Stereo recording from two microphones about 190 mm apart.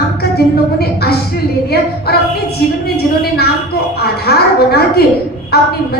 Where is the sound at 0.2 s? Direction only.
55° left (ahead or behind).